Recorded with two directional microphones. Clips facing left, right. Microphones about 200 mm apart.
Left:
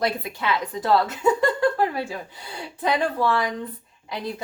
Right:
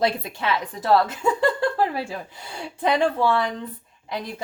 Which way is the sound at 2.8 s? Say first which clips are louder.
Right 2 dB; 25° right (ahead or behind).